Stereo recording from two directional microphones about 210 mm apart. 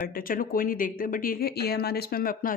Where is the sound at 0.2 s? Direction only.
40° left (ahead or behind).